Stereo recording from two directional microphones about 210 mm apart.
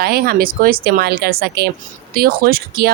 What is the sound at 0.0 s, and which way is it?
Speech, 45° right (ahead or behind).